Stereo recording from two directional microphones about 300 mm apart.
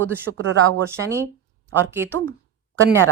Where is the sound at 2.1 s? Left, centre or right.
Centre.